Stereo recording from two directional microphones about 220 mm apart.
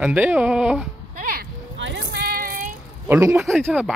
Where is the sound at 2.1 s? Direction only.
45° right (ahead or behind).